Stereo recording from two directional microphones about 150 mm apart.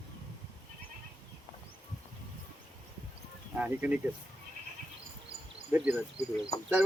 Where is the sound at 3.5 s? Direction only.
10° right (ahead or behind).